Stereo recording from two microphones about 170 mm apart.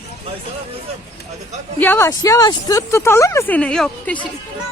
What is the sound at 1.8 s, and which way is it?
Speech, 10° left (ahead or behind).